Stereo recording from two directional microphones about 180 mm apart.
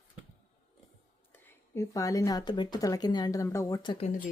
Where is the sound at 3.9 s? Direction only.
40° left (ahead or behind).